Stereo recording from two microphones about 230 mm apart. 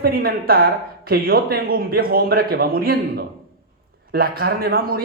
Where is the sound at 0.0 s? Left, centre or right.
Right.